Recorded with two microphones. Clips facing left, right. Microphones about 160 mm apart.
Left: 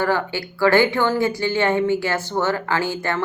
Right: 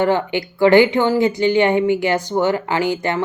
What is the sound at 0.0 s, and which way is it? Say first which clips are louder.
Speech: right 4 dB; 20° right (ahead or behind).